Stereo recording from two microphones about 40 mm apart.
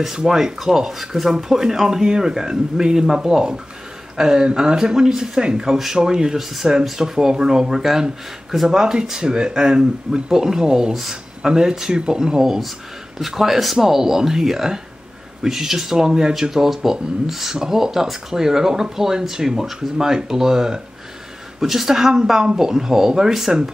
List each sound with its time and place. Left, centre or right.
0.0 s speech: centre